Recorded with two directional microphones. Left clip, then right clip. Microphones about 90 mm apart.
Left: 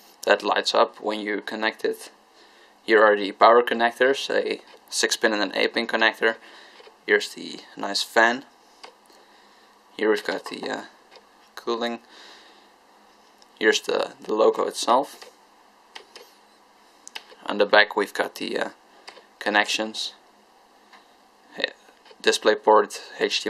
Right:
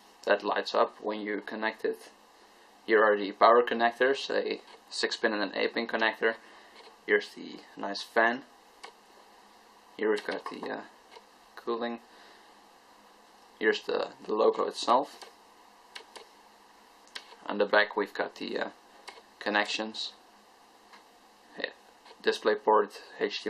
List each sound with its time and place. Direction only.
0.2 s speech: 35° left (ahead or behind)
9.9 s speech: 40° left (ahead or behind)
11.5 s a sound: 35° left (ahead or behind)
13.6 s speech: 35° left (ahead or behind)
17.1 s computer keyboard: 35° left (ahead or behind)
17.4 s speech: 35° left (ahead or behind)
22.2 s speech: 35° left (ahead or behind)